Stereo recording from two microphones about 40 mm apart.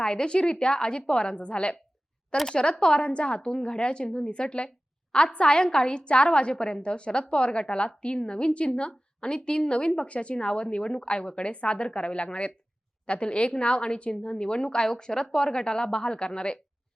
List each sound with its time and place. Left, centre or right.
0.0 s a woman's voice: left